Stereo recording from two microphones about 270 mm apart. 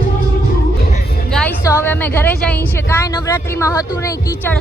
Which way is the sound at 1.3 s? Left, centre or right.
Centre.